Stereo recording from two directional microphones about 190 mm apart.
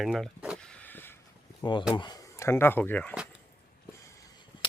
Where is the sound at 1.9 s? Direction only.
20° left (ahead or behind).